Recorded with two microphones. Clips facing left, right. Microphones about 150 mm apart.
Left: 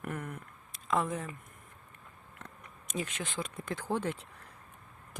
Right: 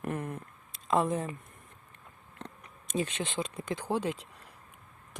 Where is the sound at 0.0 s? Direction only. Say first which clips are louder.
Right 4 dB; 25° right (ahead or behind).